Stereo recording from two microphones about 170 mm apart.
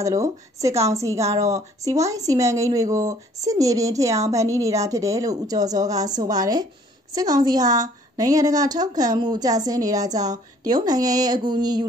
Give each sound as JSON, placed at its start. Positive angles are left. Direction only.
{"t": 0.0, "sound": "speech", "side_deg": -20}